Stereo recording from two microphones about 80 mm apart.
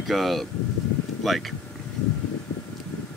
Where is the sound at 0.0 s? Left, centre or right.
Centre.